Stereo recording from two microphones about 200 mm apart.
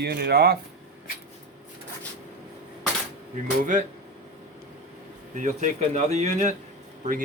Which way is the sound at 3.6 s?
40° right (ahead or behind).